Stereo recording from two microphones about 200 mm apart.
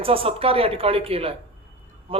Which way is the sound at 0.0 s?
25° right (ahead or behind).